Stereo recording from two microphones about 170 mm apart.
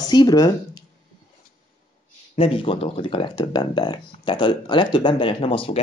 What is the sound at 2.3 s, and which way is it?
Speech, 35° left (ahead or behind).